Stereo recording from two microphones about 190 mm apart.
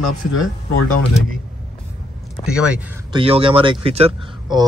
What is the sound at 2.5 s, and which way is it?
Speech, 5° right (ahead or behind).